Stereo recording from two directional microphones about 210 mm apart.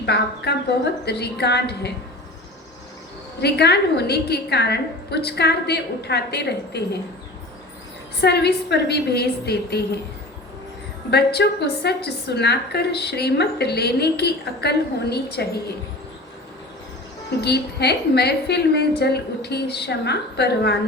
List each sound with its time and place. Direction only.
0.0 s a woman's voice: 50° left (ahead or behind)
3.4 s a woman's voice: 50° left (ahead or behind)
8.2 s a woman's voice: 50° left (ahead or behind)
11.1 s a woman's voice: 50° left (ahead or behind)
17.4 s a woman's voice: 50° left (ahead or behind)